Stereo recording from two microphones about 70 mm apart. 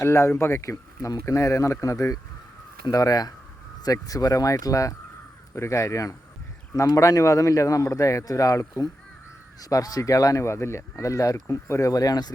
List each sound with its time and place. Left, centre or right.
0.0 s speech: left
2.9 s speech: left
9.6 s speech: left